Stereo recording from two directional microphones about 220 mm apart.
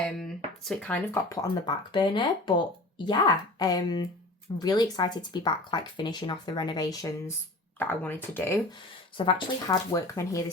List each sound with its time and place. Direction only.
0.0 s speech: centre (ahead or behind); by 2.6 s 20° left (ahead or behind)
3.6 s speech: 15° left (ahead or behind)